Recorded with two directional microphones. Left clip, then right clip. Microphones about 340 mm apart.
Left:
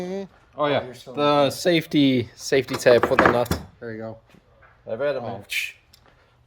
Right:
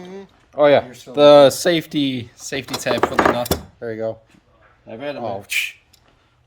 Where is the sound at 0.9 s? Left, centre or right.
Centre.